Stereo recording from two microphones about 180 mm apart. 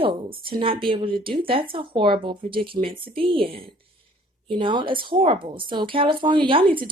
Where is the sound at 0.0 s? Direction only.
30° right (ahead or behind).